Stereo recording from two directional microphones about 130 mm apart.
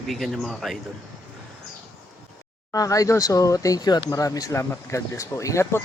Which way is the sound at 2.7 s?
25° left (ahead or behind).